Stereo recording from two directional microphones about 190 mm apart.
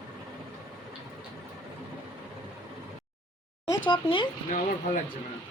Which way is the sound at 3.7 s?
25° left (ahead or behind).